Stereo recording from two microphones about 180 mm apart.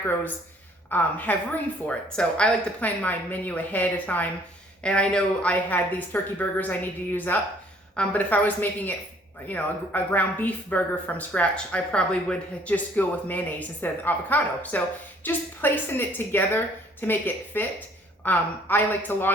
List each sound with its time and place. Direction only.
0.9 s speech: 10° left (ahead or behind)